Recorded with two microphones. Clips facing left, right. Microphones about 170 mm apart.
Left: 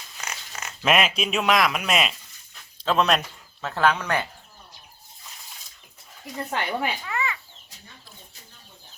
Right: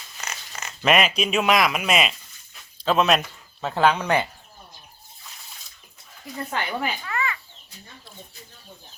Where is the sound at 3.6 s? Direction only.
15° right (ahead or behind).